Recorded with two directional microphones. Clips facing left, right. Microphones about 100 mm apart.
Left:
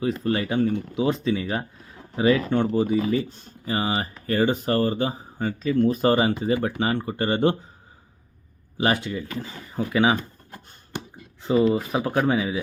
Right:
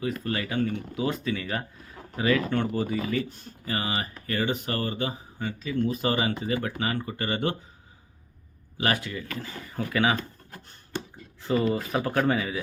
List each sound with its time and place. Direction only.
0.0 s speech: 25° left (ahead or behind)
8.8 s speech: 25° left (ahead or behind)
10.9 s a sound: 15° left (ahead or behind)
11.8 s speech: 10° left (ahead or behind)